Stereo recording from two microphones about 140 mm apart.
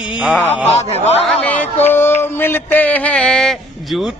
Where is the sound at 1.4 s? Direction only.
10° left (ahead or behind).